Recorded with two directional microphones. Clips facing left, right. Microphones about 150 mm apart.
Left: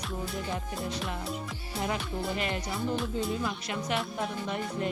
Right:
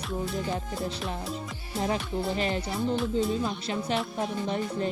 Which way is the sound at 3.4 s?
30° right (ahead or behind).